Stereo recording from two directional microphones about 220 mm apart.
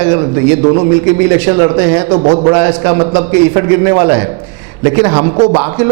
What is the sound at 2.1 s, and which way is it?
Speech, 25° right (ahead or behind).